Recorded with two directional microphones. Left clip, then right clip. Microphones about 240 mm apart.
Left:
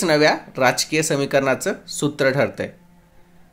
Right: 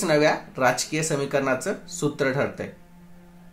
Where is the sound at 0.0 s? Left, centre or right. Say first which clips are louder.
Left 4 dB; left.